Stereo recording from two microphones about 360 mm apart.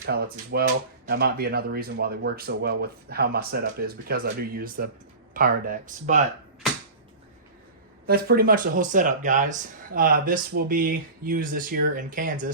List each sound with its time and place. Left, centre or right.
0.0 s speech: right
8.0 s speech: right